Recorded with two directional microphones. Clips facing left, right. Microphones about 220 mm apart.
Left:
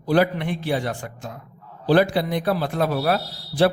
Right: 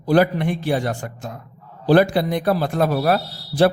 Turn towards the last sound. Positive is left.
turn(degrees=-45)  # may be behind; listen again after turning